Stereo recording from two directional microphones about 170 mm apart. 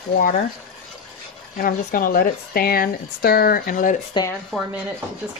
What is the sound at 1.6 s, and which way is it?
Speech, 55° left (ahead or behind).